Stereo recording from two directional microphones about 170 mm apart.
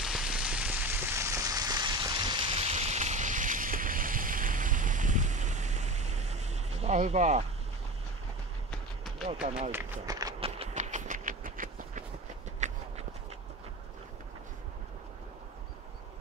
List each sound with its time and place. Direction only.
0.0 s rain on surface: 5° right (ahead or behind); by 7.4 s 40° right (ahead or behind)
9.7 s speech: 10° right (ahead or behind)
10.4 s a sound: 40° right (ahead or behind)